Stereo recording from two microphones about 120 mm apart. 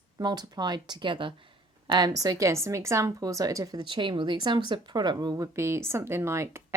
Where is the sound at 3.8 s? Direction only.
40° right (ahead or behind).